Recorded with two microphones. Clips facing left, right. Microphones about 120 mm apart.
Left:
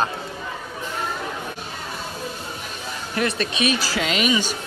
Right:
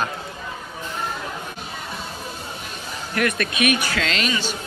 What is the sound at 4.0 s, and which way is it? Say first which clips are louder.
Speech: left 3 dB; 10° left (ahead or behind).